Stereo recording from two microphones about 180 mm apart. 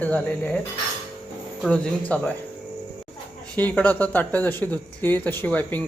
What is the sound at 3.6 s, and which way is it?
Speech, 10° left (ahead or behind).